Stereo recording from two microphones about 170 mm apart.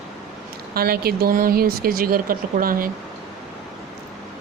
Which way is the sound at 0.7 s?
65° right (ahead or behind).